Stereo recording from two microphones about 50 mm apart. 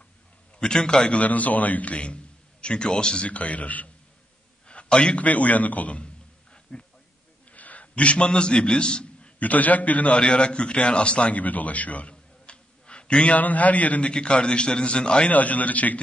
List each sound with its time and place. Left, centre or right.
0.6 s a man's voice: centre
1.1 s a man's voice: left
3.3 s a man's voice: left
6.7 s speech: centre
7.5 s a man's voice: left
9.4 s a man's voice: left
15.3 s a man's voice: left